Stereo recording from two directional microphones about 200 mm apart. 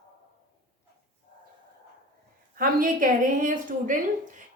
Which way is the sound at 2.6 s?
45° right (ahead or behind).